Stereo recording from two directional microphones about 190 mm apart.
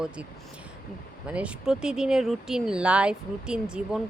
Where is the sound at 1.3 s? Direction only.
5° right (ahead or behind).